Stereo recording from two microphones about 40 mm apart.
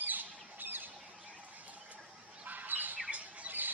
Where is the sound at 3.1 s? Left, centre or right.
Right.